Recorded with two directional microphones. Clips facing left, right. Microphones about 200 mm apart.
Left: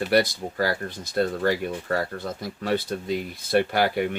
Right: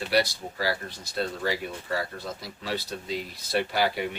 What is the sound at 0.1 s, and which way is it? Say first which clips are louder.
Speech: left 3 dB; 50° left (ahead or behind).